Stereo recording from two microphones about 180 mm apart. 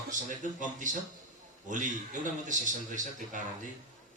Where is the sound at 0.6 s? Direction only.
45° right (ahead or behind).